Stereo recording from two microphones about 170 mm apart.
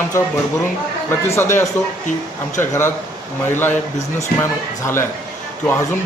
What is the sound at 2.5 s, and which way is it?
Speech, 15° left (ahead or behind).